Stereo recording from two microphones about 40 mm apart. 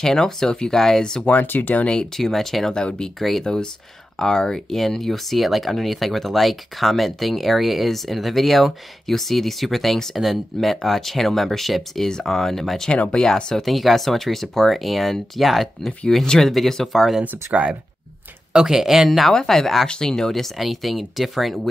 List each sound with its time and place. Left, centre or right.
0.0 s speech: centre
1.4 s speech: left
2.1 s speech: centre
12.9 s speech: left
13.2 s speech: centre
13.7 s speech: centre
17.2 s speech: right
18.5 s speech: centre
19.0 s speech: centre
20.5 s speech: centre